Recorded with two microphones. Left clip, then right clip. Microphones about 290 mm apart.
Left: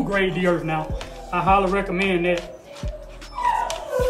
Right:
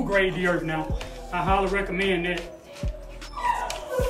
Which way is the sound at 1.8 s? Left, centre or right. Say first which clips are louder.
Left 4 dB; centre.